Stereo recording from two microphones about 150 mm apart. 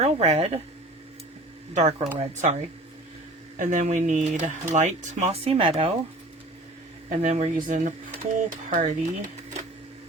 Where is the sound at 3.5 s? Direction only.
60° right (ahead or behind).